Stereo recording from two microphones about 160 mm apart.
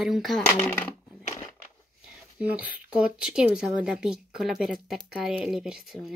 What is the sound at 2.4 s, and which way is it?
Speech, 10° right (ahead or behind).